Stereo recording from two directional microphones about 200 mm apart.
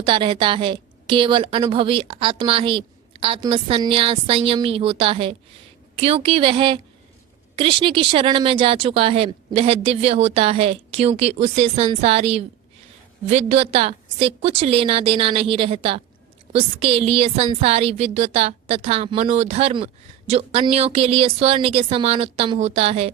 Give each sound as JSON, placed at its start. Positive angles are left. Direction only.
{"t": 0.0, "sound": "a woman's voice", "side_deg": -25}